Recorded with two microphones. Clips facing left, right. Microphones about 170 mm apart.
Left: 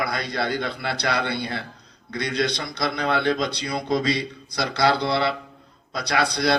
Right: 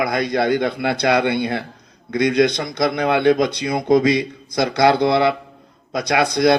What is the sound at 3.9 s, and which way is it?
Speech, 20° right (ahead or behind).